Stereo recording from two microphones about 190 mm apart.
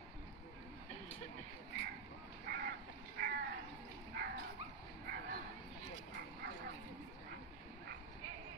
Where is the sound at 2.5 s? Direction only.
50° right (ahead or behind).